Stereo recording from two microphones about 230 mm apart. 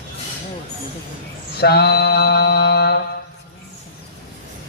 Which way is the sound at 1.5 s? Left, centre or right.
Left.